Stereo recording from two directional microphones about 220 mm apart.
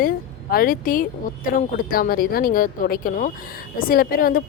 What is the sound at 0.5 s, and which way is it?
Speech, 40° left (ahead or behind).